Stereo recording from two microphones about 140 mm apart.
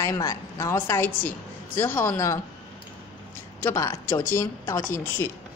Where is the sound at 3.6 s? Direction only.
20° left (ahead or behind).